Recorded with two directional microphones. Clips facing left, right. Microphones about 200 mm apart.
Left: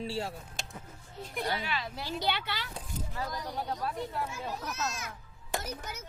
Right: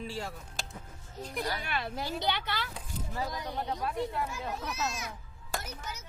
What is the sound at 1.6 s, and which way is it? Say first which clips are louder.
Speech: right 1 dB; 55° right (ahead or behind).